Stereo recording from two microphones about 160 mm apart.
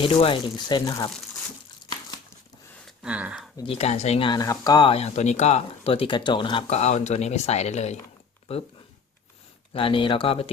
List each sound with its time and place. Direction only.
0.0 s speech: 35° left (ahead or behind)
3.0 s speech: 10° right (ahead or behind)
3.6 s speech: 40° left (ahead or behind)
4.3 s speech: 25° left (ahead or behind); by 8.6 s 40° left (ahead or behind)
9.7 s speech: 35° left (ahead or behind)